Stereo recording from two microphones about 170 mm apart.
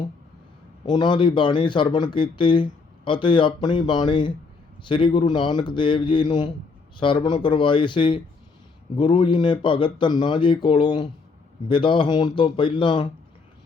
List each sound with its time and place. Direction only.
0.9 s speech: 25° left (ahead or behind)